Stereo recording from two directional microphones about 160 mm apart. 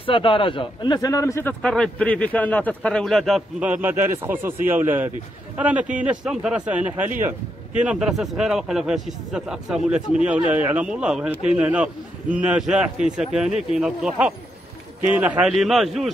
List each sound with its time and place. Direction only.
0.0 s a man's voice: 35° left (ahead or behind); by 1.5 s 15° left (ahead or behind)
1.6 s a man's voice: 5° left (ahead or behind)